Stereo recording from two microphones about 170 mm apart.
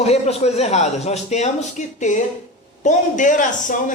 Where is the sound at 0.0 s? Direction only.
40° left (ahead or behind).